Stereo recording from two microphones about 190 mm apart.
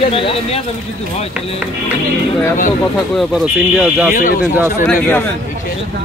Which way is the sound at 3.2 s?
Centre (ahead or behind).